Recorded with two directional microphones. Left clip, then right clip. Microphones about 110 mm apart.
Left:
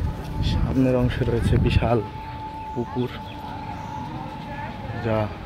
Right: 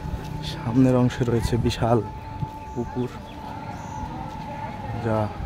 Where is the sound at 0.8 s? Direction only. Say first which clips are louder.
Right 1 dB; 55° right (ahead or behind).